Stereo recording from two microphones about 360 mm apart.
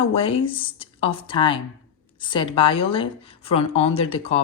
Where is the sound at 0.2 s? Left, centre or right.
Centre.